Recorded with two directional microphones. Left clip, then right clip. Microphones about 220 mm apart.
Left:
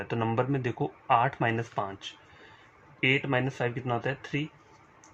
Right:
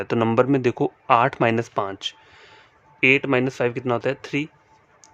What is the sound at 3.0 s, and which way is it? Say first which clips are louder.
Speech: right 8 dB; 45° right (ahead or behind).